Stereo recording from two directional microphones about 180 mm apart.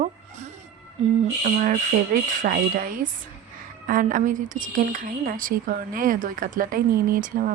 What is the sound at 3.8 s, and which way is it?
A woman's voice, 50° right (ahead or behind).